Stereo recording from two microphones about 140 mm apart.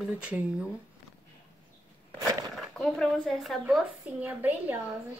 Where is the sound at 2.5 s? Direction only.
Centre (ahead or behind).